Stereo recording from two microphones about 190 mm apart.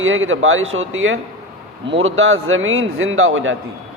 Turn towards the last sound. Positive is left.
turn(degrees=-90)